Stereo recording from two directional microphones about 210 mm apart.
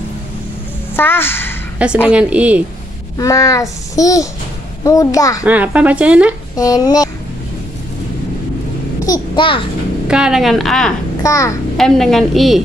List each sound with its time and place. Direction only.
0.9 s a woman's voice: 10° left (ahead or behind)
2.0 s a woman's voice: 5° right (ahead or behind)
3.2 s a child's voice: 15° left (ahead or behind)
5.4 s speech: 5° right (ahead or behind)
6.5 s a child's voice: 15° left (ahead or behind)
9.0 s a sound: 20° left (ahead or behind)
10.0 s a woman's voice: 5° right (ahead or behind)
11.2 s a child's voice: 15° left (ahead or behind)
11.7 s a woman's voice: centre (ahead or behind)